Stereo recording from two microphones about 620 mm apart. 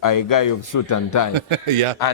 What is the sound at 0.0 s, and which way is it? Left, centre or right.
A man's voice, left.